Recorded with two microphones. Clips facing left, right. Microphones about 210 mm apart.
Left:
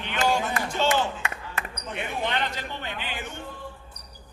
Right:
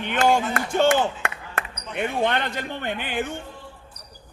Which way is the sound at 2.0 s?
55° right (ahead or behind).